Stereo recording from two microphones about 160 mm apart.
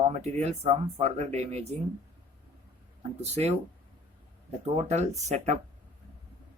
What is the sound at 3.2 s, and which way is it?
Speech, 40° right (ahead or behind).